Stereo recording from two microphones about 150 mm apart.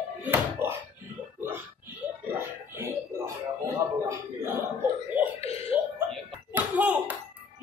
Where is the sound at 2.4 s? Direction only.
20° right (ahead or behind).